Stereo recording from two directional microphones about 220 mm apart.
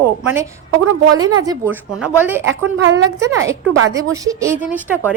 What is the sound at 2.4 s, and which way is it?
Speech, 60° right (ahead or behind).